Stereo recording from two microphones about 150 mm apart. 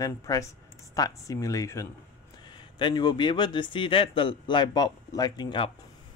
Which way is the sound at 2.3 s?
30° left (ahead or behind).